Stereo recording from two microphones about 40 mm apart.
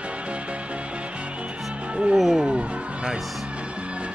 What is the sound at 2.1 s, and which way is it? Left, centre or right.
Speech, centre.